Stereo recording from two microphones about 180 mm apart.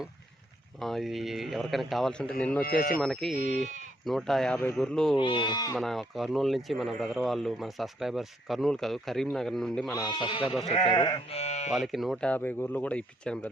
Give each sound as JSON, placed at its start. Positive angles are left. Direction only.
{"t": 0.8, "sound": "speech", "side_deg": 0}
{"t": 2.6, "sound": "speech", "side_deg": 55}
{"t": 3.0, "sound": "speech", "side_deg": 0}
{"t": 5.1, "sound": "speech", "side_deg": 25}
{"t": 5.7, "sound": "speech", "side_deg": 0}
{"t": 9.9, "sound": "speech", "side_deg": 25}
{"t": 10.4, "sound": "speech", "side_deg": 0}
{"t": 11.3, "sound": "speech", "side_deg": 35}
{"t": 11.7, "sound": "speech", "side_deg": 0}